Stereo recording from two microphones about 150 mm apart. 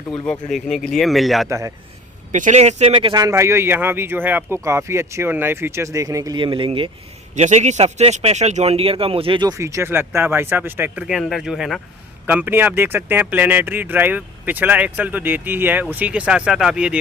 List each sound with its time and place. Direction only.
0.3 s speech: centre (ahead or behind)
1.5 s a man's voice: 20° right (ahead or behind)
2.3 s speech: 55° right (ahead or behind)
2.9 s a man's voice: 35° right (ahead or behind)
7.3 s speech: 50° right (ahead or behind); by 9.6 s 30° right (ahead or behind)
9.6 s speech: 20° right (ahead or behind)
11.0 s speech: centre (ahead or behind)